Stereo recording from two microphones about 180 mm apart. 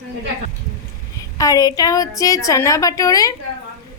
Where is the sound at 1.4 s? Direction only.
20° left (ahead or behind).